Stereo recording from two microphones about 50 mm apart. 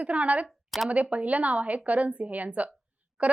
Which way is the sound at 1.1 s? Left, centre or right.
Right.